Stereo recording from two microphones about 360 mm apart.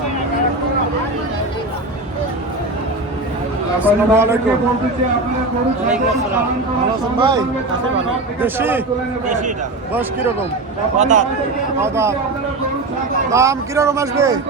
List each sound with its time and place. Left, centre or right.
3.8 s a man's voice: centre
7.2 s a man's voice: centre
9.9 s a man's voice: centre
10.9 s a man's voice: centre
11.8 s a man's voice: centre
13.3 s a man's voice: centre